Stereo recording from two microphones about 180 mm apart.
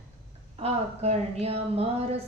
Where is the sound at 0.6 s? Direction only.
35° right (ahead or behind).